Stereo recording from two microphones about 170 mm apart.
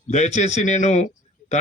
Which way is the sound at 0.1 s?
45° left (ahead or behind).